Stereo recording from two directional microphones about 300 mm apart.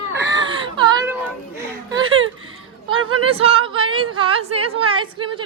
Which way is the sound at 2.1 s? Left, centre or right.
Right.